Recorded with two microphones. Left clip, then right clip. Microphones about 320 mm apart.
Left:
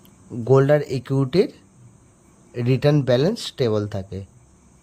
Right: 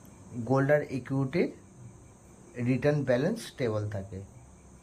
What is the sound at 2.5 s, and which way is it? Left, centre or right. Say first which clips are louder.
Speech: left 8 dB; centre.